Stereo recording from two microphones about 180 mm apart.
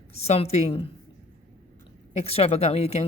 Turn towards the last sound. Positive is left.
turn(degrees=35)  # may be behind; listen again after turning